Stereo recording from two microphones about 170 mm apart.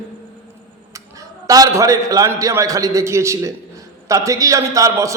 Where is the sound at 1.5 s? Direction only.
20° right (ahead or behind).